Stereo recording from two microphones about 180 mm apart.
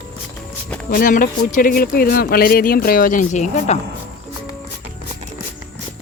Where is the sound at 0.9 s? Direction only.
50° left (ahead or behind).